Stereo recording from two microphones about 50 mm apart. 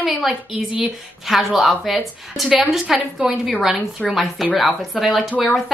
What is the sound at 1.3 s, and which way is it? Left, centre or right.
A woman's voice, centre.